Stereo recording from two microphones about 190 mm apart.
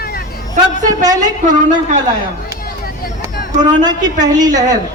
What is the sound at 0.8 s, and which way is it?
Speech, 20° right (ahead or behind).